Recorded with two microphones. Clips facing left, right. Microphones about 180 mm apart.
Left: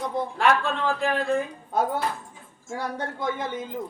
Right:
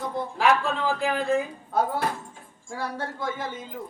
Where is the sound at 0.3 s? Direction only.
Centre (ahead or behind).